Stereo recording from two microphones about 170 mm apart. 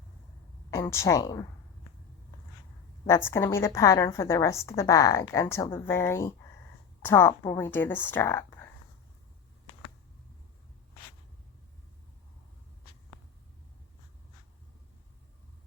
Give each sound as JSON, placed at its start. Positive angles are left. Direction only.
{"t": 0.7, "sound": "speech", "side_deg": 15}
{"t": 3.1, "sound": "a woman's voice", "side_deg": 15}